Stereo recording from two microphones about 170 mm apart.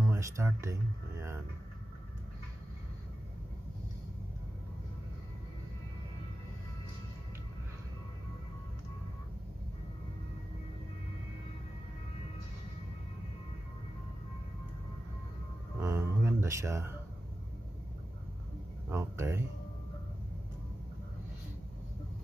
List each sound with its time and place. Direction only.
0.0 s speech: 15° right (ahead or behind)
15.8 s music: 15° right (ahead or behind)
18.9 s speech: 15° right (ahead or behind)